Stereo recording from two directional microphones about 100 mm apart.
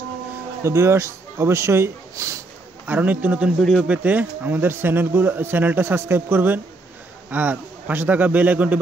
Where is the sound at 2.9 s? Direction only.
15° right (ahead or behind).